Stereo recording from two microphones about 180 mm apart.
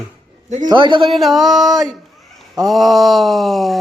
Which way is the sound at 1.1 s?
Centre (ahead or behind).